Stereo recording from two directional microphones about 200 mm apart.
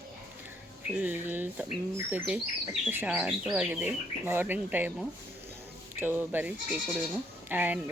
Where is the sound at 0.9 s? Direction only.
10° right (ahead or behind).